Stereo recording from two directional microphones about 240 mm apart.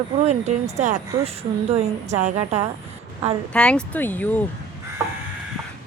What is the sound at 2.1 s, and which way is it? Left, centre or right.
Speech, right.